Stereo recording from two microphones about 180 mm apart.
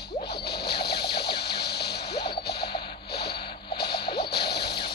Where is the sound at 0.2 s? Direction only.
65° left (ahead or behind).